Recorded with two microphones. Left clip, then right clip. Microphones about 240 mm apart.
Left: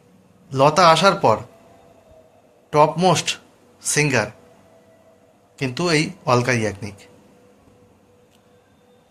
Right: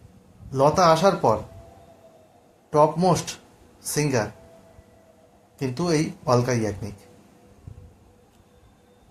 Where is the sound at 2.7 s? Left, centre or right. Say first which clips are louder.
Left 3 dB; centre.